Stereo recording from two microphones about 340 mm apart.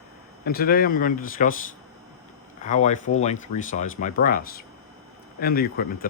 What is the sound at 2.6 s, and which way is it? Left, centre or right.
Speech, left.